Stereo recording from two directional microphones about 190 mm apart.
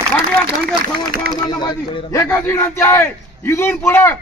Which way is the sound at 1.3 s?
20° left (ahead or behind).